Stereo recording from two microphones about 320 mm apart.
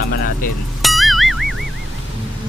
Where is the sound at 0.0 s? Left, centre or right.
Left.